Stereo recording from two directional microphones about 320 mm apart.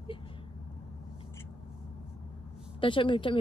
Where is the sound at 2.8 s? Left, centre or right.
Centre.